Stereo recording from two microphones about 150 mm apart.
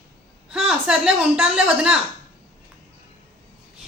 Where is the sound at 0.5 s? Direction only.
5° right (ahead or behind).